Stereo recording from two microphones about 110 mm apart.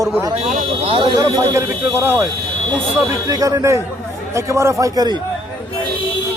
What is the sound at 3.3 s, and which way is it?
A man's voice, 35° right (ahead or behind).